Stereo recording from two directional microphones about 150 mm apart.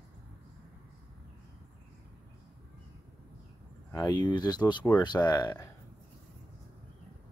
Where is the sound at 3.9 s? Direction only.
20° left (ahead or behind).